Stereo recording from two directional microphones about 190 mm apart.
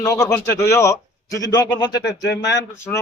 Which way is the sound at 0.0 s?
15° left (ahead or behind).